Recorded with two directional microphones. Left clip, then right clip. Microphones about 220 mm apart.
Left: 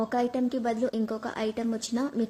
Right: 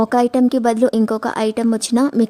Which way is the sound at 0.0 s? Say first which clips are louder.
Right 12 dB; 50° right (ahead or behind).